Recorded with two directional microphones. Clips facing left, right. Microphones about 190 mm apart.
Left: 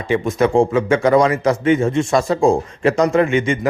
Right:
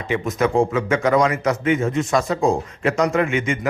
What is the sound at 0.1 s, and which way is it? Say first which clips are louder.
A man's voice: left 4 dB; 30° left (ahead or behind).